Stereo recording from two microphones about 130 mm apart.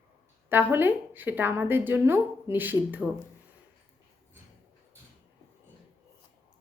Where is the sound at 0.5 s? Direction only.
15° right (ahead or behind).